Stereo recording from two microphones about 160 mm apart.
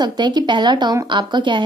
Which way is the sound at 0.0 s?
25° right (ahead or behind).